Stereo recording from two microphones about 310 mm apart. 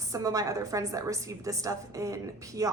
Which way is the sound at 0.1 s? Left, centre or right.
Centre.